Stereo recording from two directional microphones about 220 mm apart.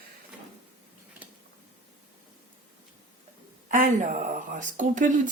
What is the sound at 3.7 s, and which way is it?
Speech, 35° right (ahead or behind).